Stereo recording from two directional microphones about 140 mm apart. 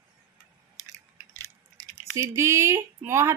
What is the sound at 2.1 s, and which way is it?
Speech, 20° right (ahead or behind).